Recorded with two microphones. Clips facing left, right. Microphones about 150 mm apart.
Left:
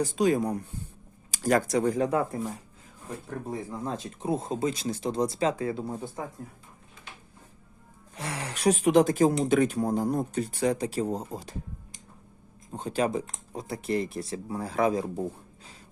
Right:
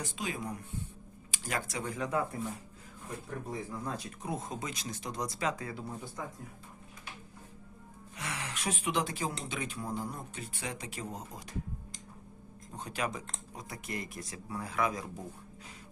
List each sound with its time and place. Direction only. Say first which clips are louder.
0.0 s speech: left 14 dB; 40° left (ahead or behind)
3.7 s speech: left 5 dB; 25° left (ahead or behind)
8.1 s speech: left 5 dB; 35° left (ahead or behind)
12.7 s speech: left 9 dB; 30° left (ahead or behind)